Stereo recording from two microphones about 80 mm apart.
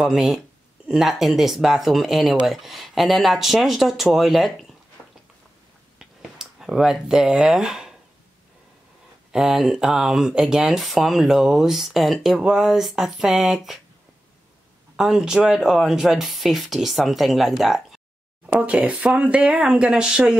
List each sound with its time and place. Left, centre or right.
0.0 s speech: centre
5.9 s a sound: centre
9.3 s speech: centre
15.0 s speech: centre
18.5 s speech: centre